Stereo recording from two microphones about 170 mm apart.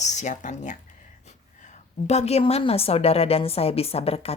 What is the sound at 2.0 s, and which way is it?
Speech, 40° left (ahead or behind).